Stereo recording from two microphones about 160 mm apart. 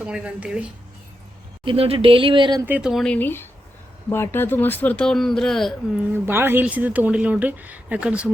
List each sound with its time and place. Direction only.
0.0 s speech: 5° right (ahead or behind)
1.6 s speech: 35° right (ahead or behind)
2.6 s speech: 5° right (ahead or behind)
6.2 s speech: 15° right (ahead or behind)